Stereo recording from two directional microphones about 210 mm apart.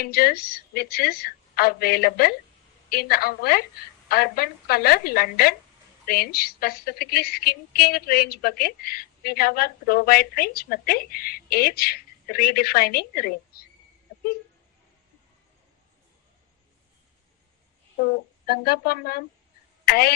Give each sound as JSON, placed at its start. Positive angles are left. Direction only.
{"t": 0.0, "sound": "a woman's voice", "side_deg": 45}
{"t": 18.0, "sound": "a woman's voice", "side_deg": 50}